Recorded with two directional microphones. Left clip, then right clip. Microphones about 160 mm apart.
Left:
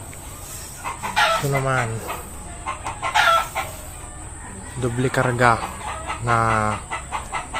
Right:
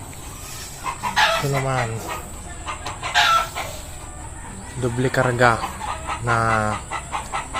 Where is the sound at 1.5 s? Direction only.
20° left (ahead or behind).